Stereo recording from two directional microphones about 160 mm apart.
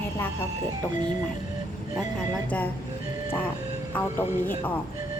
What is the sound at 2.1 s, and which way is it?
Speech, 10° left (ahead or behind).